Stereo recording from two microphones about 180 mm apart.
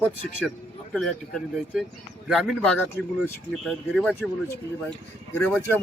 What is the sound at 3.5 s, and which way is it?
Speech, centre (ahead or behind).